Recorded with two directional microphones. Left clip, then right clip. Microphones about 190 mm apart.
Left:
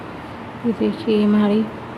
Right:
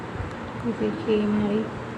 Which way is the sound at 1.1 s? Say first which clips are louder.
Left 6 dB; 45° left (ahead or behind).